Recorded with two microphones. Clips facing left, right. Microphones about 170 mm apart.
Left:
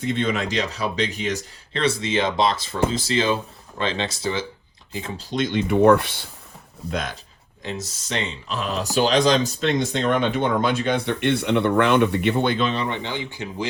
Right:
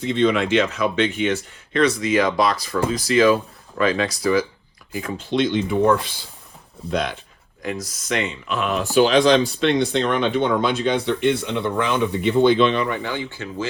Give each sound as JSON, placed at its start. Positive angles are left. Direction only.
{"t": 0.3, "sound": "speech", "side_deg": 40}
{"t": 5.2, "sound": "speech", "side_deg": 45}
{"t": 5.6, "sound": "speech", "side_deg": 65}
{"t": 6.9, "sound": "speech", "side_deg": 45}
{"t": 7.6, "sound": "speech", "side_deg": 25}
{"t": 12.7, "sound": "speech", "side_deg": 25}